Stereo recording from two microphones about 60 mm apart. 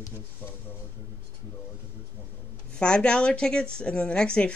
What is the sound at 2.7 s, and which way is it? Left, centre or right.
Speech, centre.